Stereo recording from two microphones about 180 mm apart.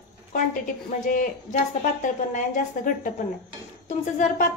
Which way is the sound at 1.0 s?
45° left (ahead or behind).